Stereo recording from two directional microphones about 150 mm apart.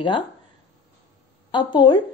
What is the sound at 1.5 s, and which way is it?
Speech, 30° left (ahead or behind).